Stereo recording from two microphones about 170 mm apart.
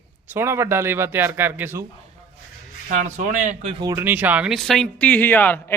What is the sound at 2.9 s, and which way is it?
Speech, 45° right (ahead or behind).